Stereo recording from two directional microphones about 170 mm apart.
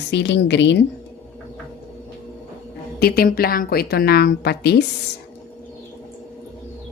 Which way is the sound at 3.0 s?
65° left (ahead or behind).